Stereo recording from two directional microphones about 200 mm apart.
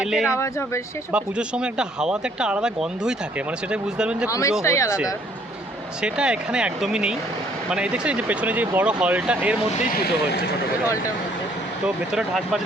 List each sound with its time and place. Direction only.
0.0 s speech: centre (ahead or behind)
0.3 s speech: 15° left (ahead or behind)
1.1 s speech: 5° right (ahead or behind)
4.3 s speech: 15° left (ahead or behind)
6.0 s speech: 5° right (ahead or behind)
9.9 s speech: 50° left (ahead or behind)
12.1 s speech: centre (ahead or behind)